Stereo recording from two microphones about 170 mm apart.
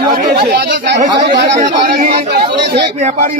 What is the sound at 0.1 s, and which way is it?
Chatter, 60° right (ahead or behind).